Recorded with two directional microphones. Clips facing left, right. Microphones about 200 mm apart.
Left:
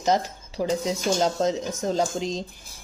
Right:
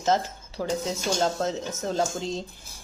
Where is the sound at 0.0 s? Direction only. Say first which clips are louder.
Left 1 dB; 15° left (ahead or behind).